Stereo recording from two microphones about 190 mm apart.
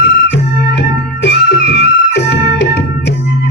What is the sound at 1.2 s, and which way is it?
Music, 60° left (ahead or behind).